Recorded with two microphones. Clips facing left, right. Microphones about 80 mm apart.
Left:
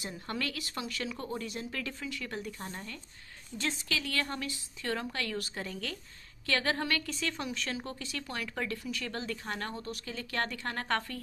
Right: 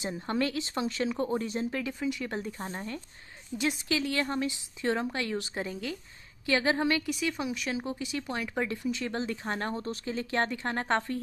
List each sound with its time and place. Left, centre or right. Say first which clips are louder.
0.0 s speech: right 7 dB; right
1.8 s speech: right 6 dB; centre
3.5 s a woman's voice: right 5 dB; centre